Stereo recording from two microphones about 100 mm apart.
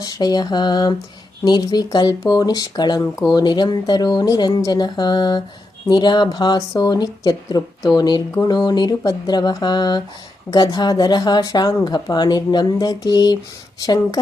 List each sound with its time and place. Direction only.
0.0 s speech: 40° left (ahead or behind)